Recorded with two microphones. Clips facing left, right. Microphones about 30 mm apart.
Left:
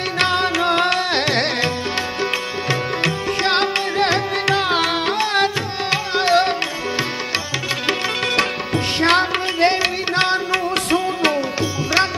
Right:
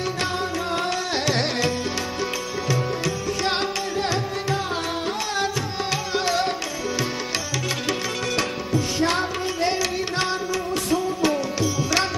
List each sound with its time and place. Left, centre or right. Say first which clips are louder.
0.2 s music: left 13 dB; left
4.0 s music: left 9 dB; left
9.0 s music: left 10 dB; left